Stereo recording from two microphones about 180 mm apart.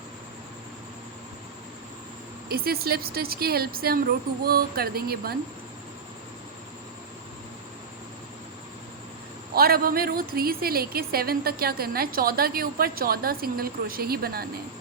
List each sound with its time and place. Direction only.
2.5 s a woman's voice: 60° right (ahead or behind)
9.6 s a woman's voice: 55° right (ahead or behind)